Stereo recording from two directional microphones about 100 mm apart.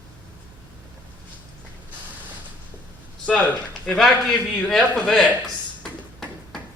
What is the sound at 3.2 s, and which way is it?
A man's voice, 10° left (ahead or behind).